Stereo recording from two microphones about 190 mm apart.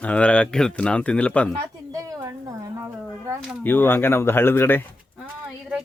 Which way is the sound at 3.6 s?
10° left (ahead or behind).